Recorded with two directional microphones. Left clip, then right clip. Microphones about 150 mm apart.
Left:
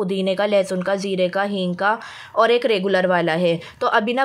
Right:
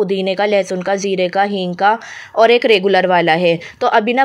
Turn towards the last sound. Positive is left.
turn(degrees=-20)  # may be behind; listen again after turning